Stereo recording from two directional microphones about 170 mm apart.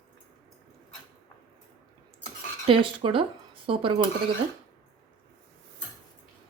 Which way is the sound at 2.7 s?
30° right (ahead or behind).